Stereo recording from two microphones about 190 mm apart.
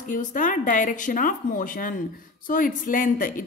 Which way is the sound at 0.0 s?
45° left (ahead or behind).